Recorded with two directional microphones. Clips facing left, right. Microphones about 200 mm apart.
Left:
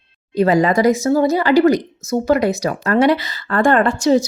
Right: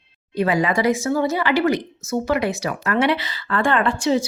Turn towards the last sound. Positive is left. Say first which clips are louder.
# left 5 dB
turn(degrees=40)  # may be behind; listen again after turning